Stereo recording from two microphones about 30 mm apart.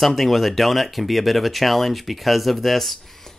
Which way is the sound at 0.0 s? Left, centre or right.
Centre.